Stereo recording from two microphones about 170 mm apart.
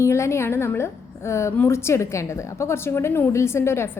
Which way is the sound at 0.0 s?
15° left (ahead or behind).